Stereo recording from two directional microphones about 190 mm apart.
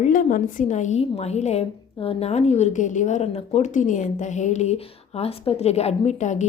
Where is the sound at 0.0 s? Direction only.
45° left (ahead or behind).